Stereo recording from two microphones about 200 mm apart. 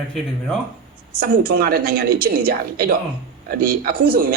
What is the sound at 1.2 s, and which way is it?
Speech, 45° right (ahead or behind).